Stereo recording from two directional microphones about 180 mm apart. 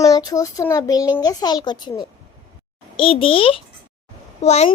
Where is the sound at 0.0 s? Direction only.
20° left (ahead or behind).